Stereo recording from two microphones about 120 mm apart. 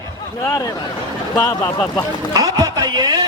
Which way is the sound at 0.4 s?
30° left (ahead or behind).